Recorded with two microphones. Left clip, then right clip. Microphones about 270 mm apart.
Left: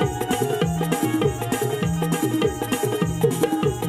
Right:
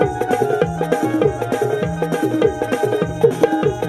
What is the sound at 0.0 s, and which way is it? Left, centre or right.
Music, left.